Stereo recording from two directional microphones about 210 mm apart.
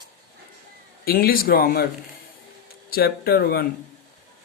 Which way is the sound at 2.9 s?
45° left (ahead or behind).